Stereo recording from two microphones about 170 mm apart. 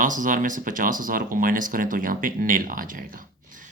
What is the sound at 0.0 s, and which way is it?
Speech, 50° right (ahead or behind).